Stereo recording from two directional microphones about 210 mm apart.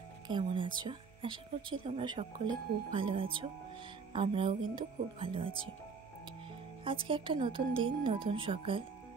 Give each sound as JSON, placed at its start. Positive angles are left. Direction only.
{"t": 0.3, "sound": "speech", "side_deg": -20}
{"t": 6.8, "sound": "speech", "side_deg": -25}